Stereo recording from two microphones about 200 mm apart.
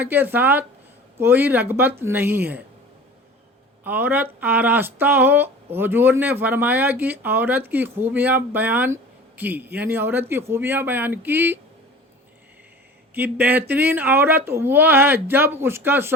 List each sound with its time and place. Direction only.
0.0 s speech: 10° right (ahead or behind)
3.8 s speech: 10° right (ahead or behind)
13.1 s speech: 10° right (ahead or behind)